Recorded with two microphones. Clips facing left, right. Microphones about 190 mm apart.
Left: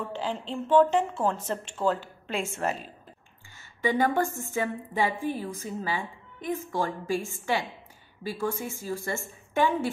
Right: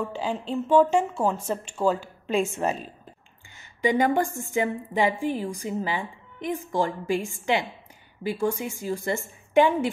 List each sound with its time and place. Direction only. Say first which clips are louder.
0.0 s a woman's voice: right 3 dB; 10° right (ahead or behind)
3.5 s a sound: right 3 dB; 15° right (ahead or behind)
4.5 s a woman's voice: right 4 dB; 15° right (ahead or behind)